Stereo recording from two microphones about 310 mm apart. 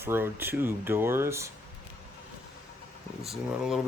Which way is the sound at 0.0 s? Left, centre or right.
Centre.